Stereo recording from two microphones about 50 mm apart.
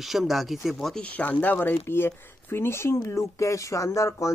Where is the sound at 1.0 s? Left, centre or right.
Left.